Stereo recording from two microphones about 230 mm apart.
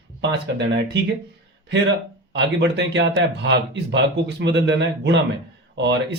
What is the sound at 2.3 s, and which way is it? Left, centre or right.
Speech, right.